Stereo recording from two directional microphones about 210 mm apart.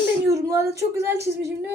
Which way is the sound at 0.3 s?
15° right (ahead or behind).